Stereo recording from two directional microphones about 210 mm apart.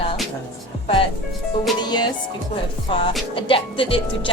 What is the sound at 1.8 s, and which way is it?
A woman's voice, 20° left (ahead or behind).